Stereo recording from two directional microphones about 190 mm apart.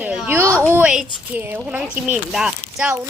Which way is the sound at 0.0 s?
5° right (ahead or behind).